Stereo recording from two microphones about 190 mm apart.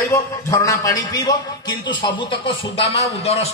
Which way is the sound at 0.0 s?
15° left (ahead or behind).